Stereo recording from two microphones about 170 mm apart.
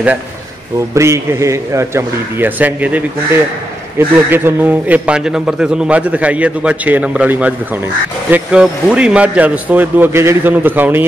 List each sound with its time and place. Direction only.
0.9 s a man's voice: 15° right (ahead or behind)